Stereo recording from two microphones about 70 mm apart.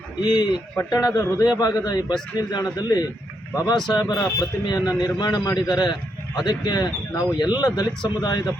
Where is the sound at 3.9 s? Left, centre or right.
Left.